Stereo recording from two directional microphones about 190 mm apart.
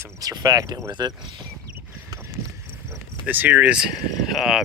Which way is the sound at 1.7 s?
10° right (ahead or behind).